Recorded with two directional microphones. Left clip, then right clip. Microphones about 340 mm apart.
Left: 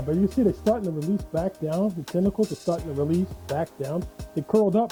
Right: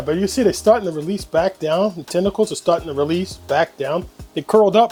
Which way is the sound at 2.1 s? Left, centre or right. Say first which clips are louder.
Right 6 dB; right.